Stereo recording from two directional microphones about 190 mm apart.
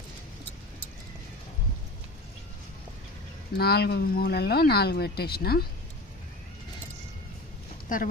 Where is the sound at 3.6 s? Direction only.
55° left (ahead or behind).